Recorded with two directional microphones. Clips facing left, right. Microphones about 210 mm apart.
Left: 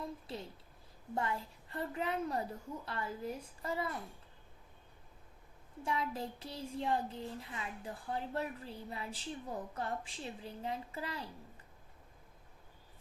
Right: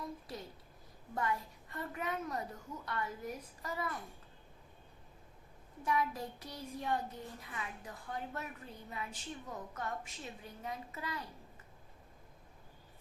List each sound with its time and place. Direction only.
1.1 s speech: 25° left (ahead or behind)
5.8 s speech: 25° left (ahead or behind)